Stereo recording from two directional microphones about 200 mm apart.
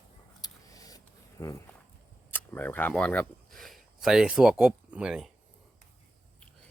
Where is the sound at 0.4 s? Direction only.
15° left (ahead or behind).